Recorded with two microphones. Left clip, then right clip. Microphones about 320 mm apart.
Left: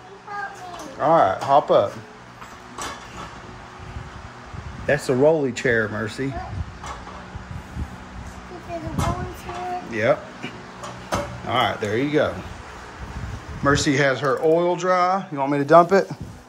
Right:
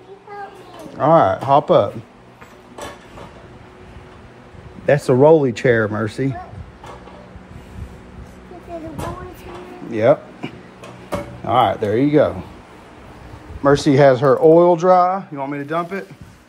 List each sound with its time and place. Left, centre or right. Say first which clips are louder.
0.9 s speech: right 4 dB; right
4.8 s speech: right 6 dB; right
9.8 s guitar: right 7 dB; centre
11.4 s speech: right 7 dB; centre
13.7 s speech: right 7 dB; centre
15.0 s speech: even; centre